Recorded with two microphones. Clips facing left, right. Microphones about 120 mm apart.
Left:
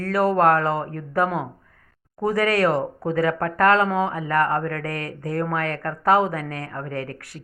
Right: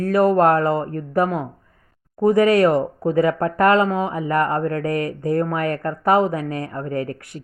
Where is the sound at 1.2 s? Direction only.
Centre (ahead or behind).